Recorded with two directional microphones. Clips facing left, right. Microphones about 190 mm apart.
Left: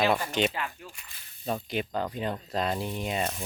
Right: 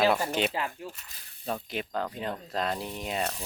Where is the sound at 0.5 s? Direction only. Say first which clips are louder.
Right 2 dB; 30° right (ahead or behind).